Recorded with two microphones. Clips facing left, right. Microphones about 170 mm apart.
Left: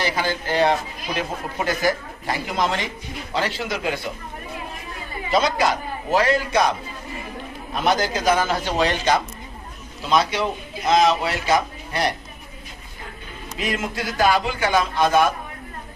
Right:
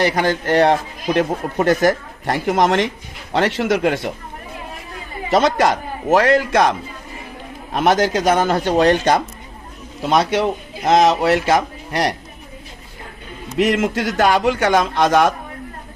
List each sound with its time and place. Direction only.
0.0 s a man's voice: 65° right (ahead or behind)
2.5 s a man's voice: 90° right
3.3 s a man's voice: 75° right (ahead or behind)
5.3 s a man's voice: 75° right (ahead or behind)
7.7 s a man's voice: 90° right; by 9.2 s 55° right (ahead or behind)
10.0 s a man's voice: 65° right (ahead or behind)
13.6 s a man's voice: 90° right